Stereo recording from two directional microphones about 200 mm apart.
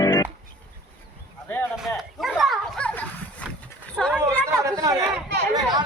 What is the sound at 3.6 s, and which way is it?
Livestock, 5° left (ahead or behind).